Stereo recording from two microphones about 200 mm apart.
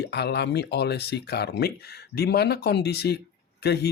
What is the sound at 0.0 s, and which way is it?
Speech, 55° left (ahead or behind).